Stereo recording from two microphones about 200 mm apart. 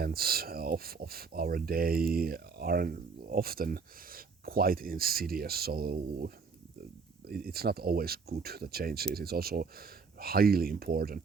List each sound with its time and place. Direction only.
0.0 s speech: 50° right (ahead or behind)